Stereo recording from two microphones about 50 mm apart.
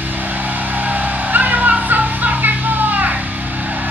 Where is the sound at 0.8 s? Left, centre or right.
Right.